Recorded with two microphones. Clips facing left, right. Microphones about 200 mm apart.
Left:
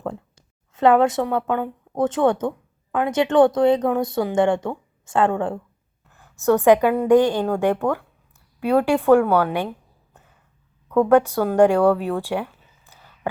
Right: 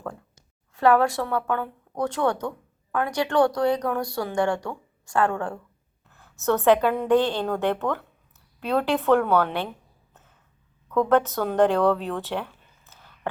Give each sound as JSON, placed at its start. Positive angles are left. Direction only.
{"t": 0.7, "sound": "a woman's voice", "side_deg": 20}